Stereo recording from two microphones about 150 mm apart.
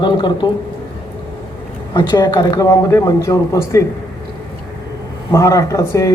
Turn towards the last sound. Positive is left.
turn(degrees=20)  # may be behind; listen again after turning